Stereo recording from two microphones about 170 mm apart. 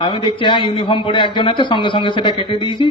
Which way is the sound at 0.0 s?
30° left (ahead or behind).